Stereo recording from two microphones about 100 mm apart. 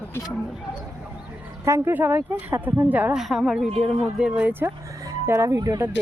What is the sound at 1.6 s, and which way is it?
Speech, 30° right (ahead or behind).